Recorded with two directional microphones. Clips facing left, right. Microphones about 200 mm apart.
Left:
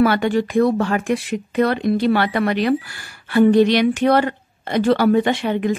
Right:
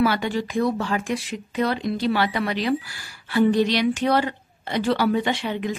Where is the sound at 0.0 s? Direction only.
55° left (ahead or behind).